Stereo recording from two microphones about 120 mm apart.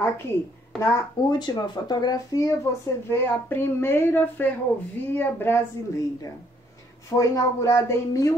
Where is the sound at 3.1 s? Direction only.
20° left (ahead or behind).